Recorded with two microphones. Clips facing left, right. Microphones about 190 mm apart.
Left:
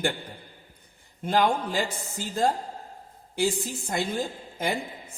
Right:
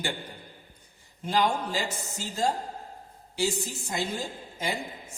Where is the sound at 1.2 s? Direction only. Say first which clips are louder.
Left 3 dB; 55° left (ahead or behind).